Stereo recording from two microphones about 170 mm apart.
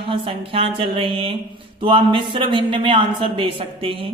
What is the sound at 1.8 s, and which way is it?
Speech, 30° right (ahead or behind).